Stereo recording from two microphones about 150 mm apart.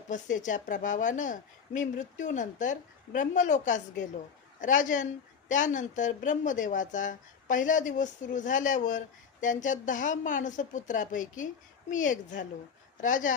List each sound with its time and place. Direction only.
0.1 s speech: 55° left (ahead or behind)